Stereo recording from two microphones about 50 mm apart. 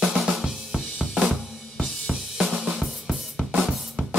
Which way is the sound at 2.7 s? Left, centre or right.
Centre.